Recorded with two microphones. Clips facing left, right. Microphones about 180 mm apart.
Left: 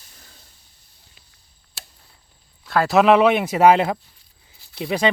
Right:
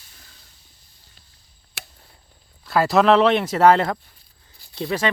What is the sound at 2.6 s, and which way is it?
Speech, centre (ahead or behind).